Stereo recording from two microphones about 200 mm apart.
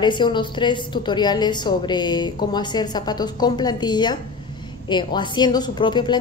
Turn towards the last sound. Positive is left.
turn(degrees=20)  # may be behind; listen again after turning